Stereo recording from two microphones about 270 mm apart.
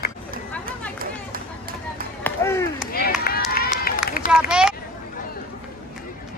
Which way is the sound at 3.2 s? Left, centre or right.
Left.